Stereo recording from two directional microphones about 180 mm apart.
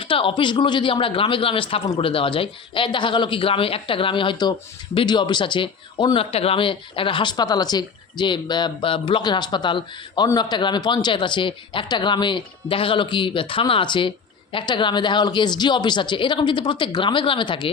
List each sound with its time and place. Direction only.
0.0 s speech: 30° left (ahead or behind)